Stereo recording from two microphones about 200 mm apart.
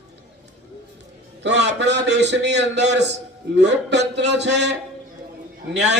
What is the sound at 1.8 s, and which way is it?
A man's voice, 60° right (ahead or behind).